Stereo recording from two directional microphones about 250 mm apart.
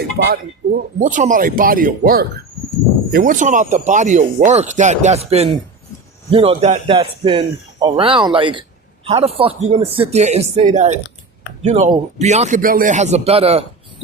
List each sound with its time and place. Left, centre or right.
0.2 s speech: right